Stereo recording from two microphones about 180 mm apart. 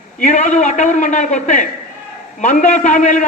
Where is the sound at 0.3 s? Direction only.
40° left (ahead or behind).